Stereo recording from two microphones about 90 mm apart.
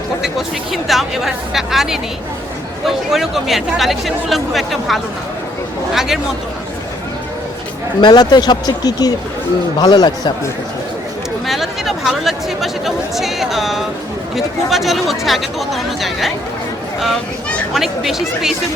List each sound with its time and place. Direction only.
0.2 s speech: centre (ahead or behind)
8.0 s speech: 55° left (ahead or behind)
11.4 s speech: centre (ahead or behind)
17.7 s speech: 5° right (ahead or behind)